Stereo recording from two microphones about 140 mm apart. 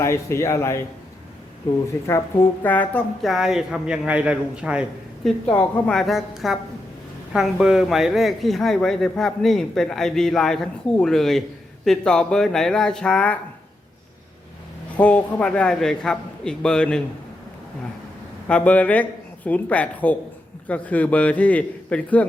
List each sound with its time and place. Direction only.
0.0 s a man's voice: 20° left (ahead or behind)
1.9 s a man's voice: 20° left (ahead or behind)
2.6 s a man's voice: 10° left (ahead or behind)
3.2 s a man's voice: 5° right (ahead or behind)
5.5 s speech: 5° left (ahead or behind)
14.9 s a man's voice: 10° left (ahead or behind)
18.4 s a man's voice: 10° left (ahead or behind)